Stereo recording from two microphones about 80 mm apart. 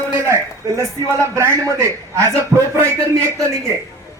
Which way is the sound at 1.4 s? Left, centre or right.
Right.